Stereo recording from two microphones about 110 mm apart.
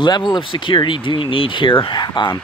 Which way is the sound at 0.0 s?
40° left (ahead or behind).